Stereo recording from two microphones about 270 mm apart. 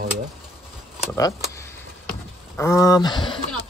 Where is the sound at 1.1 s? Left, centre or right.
Centre.